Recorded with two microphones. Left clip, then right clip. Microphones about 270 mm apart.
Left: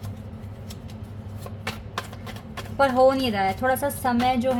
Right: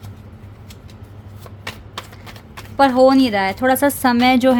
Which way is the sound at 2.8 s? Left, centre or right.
Right.